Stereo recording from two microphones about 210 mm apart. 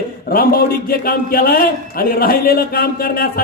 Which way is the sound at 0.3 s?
45° left (ahead or behind).